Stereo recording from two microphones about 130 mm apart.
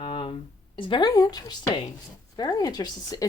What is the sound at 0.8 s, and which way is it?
Speech, 40° left (ahead or behind).